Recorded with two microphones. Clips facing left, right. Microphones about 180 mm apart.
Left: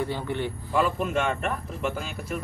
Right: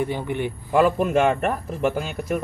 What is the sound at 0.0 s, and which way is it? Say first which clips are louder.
Speech: right 4 dB; 15° right (ahead or behind).